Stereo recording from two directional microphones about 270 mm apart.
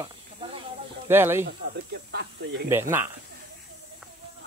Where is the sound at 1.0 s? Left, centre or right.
Centre.